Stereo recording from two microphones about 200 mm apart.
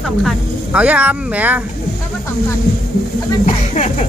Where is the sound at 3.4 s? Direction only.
35° left (ahead or behind).